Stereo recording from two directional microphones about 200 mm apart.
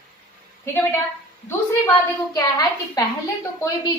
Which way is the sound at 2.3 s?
20° left (ahead or behind).